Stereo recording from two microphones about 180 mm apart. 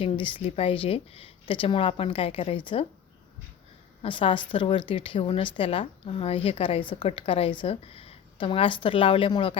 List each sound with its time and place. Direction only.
0.0 s a woman's voice: 30° left (ahead or behind)
4.0 s a woman's voice: 30° left (ahead or behind)